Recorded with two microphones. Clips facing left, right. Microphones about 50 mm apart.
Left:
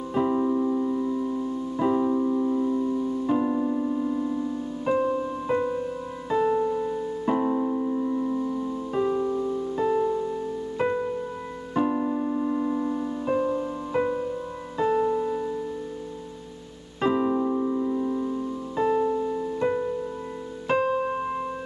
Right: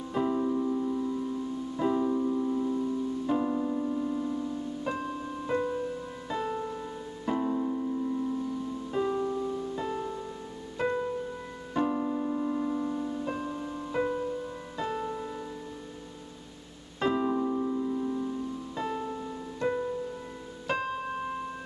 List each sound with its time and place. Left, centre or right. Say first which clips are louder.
0.1 s piano: left 5 dB; centre
6.3 s keyboard: left 10 dB; centre
7.3 s piano: left 3 dB; left
8.9 s piano: left 4 dB; centre
10.8 s music: left 3 dB; left
17.0 s piano: left 4 dB; centre
20.6 s music: left 8 dB; centre